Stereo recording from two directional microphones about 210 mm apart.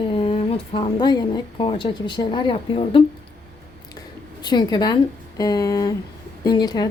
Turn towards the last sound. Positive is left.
turn(degrees=20)  # may be behind; listen again after turning